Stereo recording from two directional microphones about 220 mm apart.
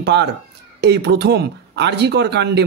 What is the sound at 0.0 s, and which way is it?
A man's voice, 50° right (ahead or behind).